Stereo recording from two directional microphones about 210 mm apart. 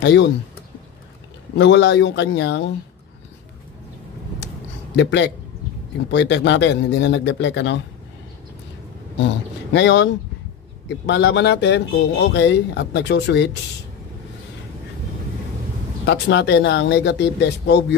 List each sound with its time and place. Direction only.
0.0 s speech: 55° left (ahead or behind)
1.6 s speech: 55° left (ahead or behind)
4.9 s speech: 55° left (ahead or behind)
9.2 s speech: 55° left (ahead or behind)
16.1 s speech: 55° left (ahead or behind)